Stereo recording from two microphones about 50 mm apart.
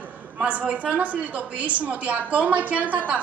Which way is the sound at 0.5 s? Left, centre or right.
Right.